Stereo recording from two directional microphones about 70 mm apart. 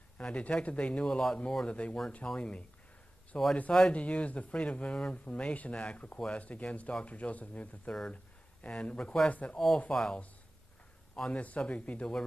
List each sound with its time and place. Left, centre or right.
0.2 s speech: centre